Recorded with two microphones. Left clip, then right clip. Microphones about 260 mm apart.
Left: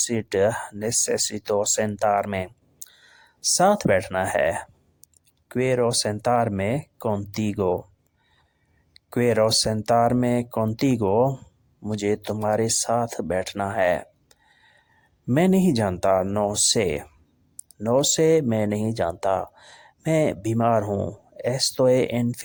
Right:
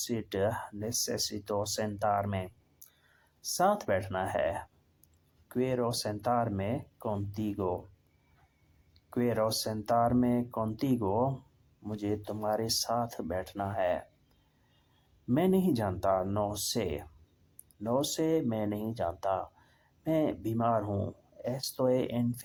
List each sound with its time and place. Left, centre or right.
0.0 s speech: left
8.9 s speech: left
15.3 s speech: left